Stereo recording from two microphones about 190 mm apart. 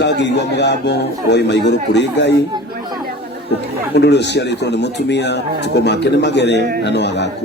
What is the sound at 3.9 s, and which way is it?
A man's voice, 60° left (ahead or behind).